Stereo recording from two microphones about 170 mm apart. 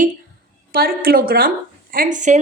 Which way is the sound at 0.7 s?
60° right (ahead or behind).